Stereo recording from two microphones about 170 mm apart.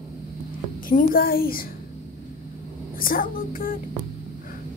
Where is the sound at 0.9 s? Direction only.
55° left (ahead or behind).